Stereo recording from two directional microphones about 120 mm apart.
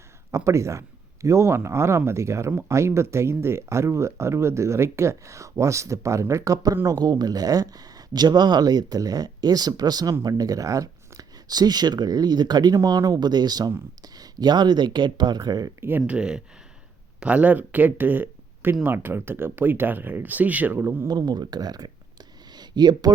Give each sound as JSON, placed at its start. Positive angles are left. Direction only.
{"t": 0.3, "sound": "speech", "side_deg": -25}
{"t": 15.8, "sound": "speech", "side_deg": -15}
{"t": 21.1, "sound": "speech", "side_deg": -35}